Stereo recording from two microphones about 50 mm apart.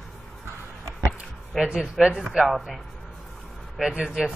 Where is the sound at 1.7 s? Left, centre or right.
Centre.